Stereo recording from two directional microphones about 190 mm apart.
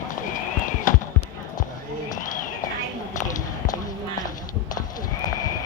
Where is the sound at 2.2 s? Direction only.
45° left (ahead or behind).